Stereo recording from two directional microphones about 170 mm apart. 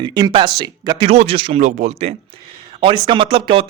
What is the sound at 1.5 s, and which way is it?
Speech, 45° right (ahead or behind).